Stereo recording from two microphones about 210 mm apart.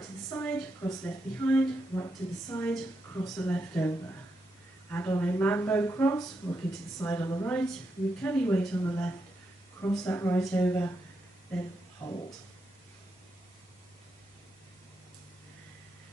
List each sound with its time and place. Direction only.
0.3 s a woman's voice: 10° left (ahead or behind)
4.9 s a woman's voice: 10° left (ahead or behind)